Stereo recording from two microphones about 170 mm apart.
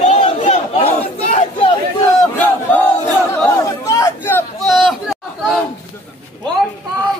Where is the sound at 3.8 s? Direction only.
15° left (ahead or behind).